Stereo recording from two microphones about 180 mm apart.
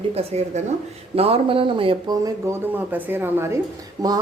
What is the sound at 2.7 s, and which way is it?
Speech, 10° right (ahead or behind).